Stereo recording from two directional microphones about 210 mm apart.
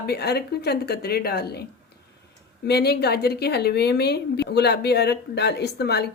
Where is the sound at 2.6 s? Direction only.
50° left (ahead or behind).